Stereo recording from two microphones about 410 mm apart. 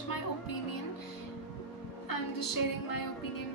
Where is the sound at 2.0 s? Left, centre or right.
Left.